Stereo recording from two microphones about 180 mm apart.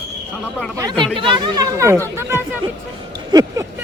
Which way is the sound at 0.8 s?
25° right (ahead or behind).